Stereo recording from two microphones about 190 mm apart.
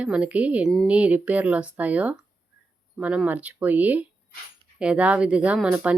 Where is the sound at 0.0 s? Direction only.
5° right (ahead or behind).